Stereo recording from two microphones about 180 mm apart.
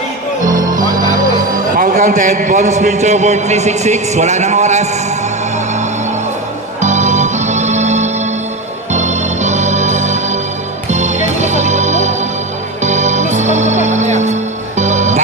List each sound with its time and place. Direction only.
1.7 s a man's voice: 45° right (ahead or behind)
6.8 s music: 40° right (ahead or behind)
8.9 s organ: 40° right (ahead or behind)
10.9 s music: 40° right (ahead or behind)
11.3 s organ: 40° right (ahead or behind)
12.8 s music: 40° right (ahead or behind)